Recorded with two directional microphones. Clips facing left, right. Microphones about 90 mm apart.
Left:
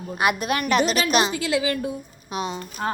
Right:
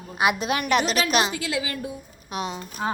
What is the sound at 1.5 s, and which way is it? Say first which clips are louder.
Speech: left 6 dB; 60° left (ahead or behind).